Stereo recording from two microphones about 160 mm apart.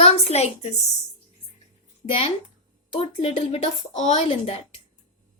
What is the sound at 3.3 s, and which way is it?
Speech, 45° left (ahead or behind).